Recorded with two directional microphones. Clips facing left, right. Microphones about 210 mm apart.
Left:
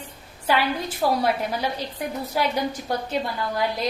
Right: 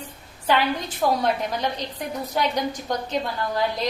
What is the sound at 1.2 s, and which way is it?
A woman's voice, 10° left (ahead or behind).